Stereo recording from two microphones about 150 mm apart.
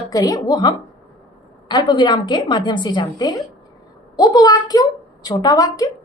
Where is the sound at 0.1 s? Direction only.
25° left (ahead or behind).